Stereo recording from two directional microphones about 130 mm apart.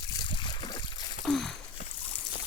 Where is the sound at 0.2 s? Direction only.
40° left (ahead or behind).